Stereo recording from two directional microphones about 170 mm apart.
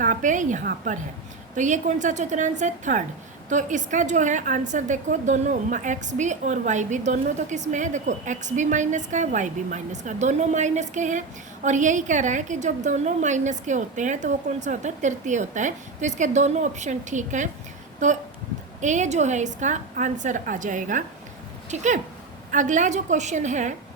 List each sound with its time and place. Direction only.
0.0 s a woman's voice: 50° right (ahead or behind)